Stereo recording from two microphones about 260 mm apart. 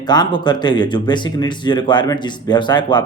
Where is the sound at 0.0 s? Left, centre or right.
Centre.